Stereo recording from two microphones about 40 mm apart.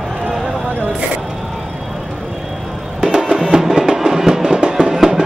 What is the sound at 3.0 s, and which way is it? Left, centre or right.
Music, centre.